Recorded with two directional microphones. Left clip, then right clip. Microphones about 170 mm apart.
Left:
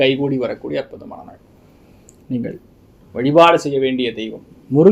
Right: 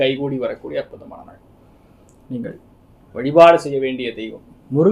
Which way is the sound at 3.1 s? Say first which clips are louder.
Right 1 dB; 40° left (ahead or behind).